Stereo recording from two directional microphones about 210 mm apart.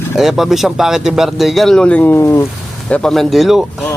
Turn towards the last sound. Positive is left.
turn(degrees=0)  # may be behind; listen again after turning